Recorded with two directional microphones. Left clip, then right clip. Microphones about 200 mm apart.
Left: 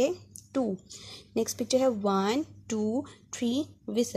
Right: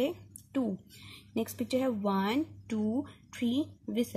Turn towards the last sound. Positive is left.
turn(degrees=40)  # may be behind; listen again after turning